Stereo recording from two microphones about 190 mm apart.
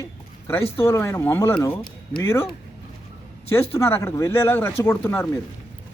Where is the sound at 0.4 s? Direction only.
10° left (ahead or behind).